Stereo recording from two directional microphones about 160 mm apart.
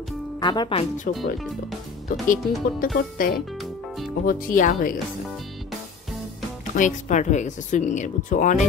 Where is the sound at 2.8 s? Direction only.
65° left (ahead or behind).